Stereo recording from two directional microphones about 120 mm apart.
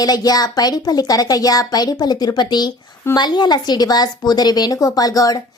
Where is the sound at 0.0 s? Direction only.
35° left (ahead or behind).